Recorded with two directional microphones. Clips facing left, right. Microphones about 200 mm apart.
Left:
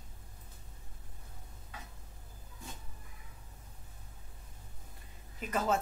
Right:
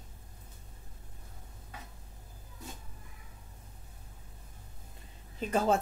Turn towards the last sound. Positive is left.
turn(degrees=-30)  # may be behind; listen again after turning